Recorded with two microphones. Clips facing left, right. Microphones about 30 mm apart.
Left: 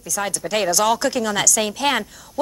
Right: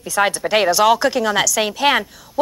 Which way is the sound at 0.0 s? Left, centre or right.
Right.